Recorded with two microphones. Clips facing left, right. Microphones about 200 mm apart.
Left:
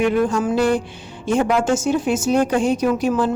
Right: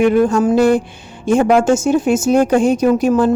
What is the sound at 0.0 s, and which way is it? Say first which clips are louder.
A woman's voice: right 6 dB; 45° right (ahead or behind).